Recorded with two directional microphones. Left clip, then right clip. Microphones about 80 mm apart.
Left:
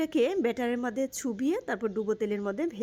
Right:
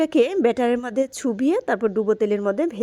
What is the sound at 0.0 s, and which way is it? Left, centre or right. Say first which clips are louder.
A woman's voice: right 8 dB; right.